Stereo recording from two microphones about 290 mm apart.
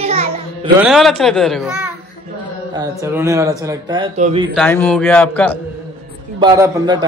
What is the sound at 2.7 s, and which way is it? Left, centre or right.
Speech, centre.